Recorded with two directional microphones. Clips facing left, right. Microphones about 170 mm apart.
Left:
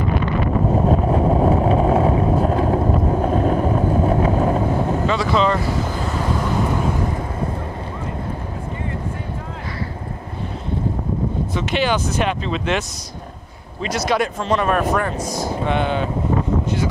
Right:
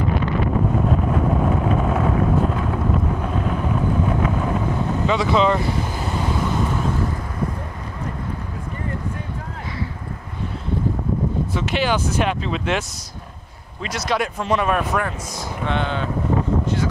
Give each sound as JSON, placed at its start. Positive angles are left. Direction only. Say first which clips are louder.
{"t": 0.8, "sound": "vehicle", "louder": "left 3 dB", "side_deg": 35}
{"t": 5.0, "sound": "speech", "louder": "right 3 dB", "side_deg": -20}
{"t": 11.5, "sound": "speech", "louder": "left 2 dB", "side_deg": -5}
{"t": 13.9, "sound": "speech", "louder": "left 3 dB", "side_deg": 0}
{"t": 15.1, "sound": "speech", "louder": "left 7 dB", "side_deg": 35}
{"t": 15.6, "sound": "speech", "louder": "left 2 dB", "side_deg": 15}